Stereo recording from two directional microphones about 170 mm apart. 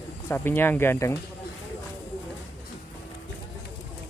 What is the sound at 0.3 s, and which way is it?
Speech, 10° left (ahead or behind).